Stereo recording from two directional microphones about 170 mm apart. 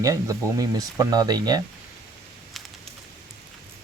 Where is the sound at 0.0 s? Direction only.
20° right (ahead or behind).